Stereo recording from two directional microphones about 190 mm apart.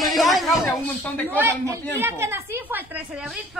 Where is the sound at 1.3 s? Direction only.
10° right (ahead or behind).